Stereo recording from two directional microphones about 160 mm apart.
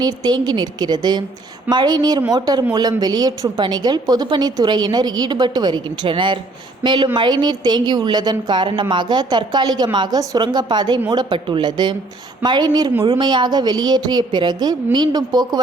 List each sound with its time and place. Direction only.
0.0 s a woman's voice: 25° right (ahead or behind)